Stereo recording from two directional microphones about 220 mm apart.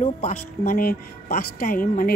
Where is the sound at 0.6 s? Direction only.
40° left (ahead or behind).